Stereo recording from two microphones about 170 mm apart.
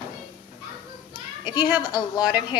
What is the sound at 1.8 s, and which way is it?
Speech, 25° left (ahead or behind).